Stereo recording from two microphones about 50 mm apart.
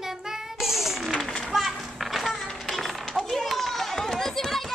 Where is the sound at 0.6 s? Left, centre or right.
Centre.